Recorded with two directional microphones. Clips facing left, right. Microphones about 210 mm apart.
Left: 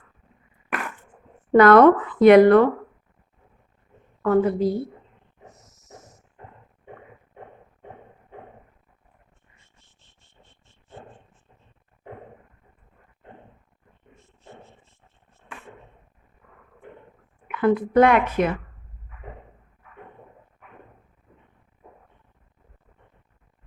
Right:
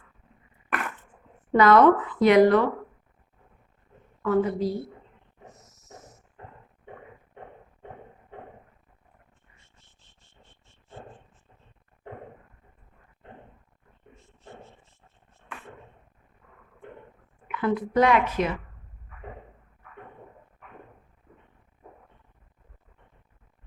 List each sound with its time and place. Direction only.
1.5 s a woman's voice: 55° left (ahead or behind)
4.2 s a woman's voice: 50° left (ahead or behind)
17.5 s a woman's voice: 55° left (ahead or behind)